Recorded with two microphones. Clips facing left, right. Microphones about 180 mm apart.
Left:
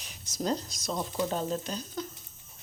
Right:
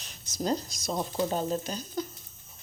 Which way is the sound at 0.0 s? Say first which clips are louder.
Right 1 dB; 10° left (ahead or behind).